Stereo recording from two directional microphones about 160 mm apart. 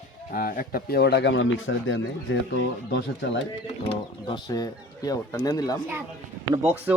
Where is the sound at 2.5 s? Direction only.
90° left.